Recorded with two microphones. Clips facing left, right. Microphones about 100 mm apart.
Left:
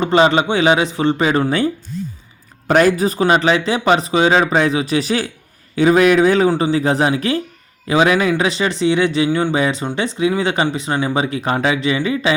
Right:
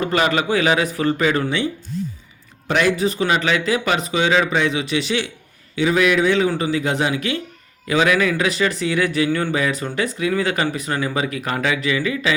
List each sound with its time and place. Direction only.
0.0 s speech: 25° left (ahead or behind)
2.6 s speech: 40° left (ahead or behind)